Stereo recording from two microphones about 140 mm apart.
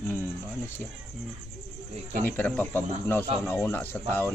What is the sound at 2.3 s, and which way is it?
Speech, 10° left (ahead or behind).